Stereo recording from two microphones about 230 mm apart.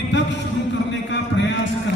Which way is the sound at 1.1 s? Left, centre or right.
Left.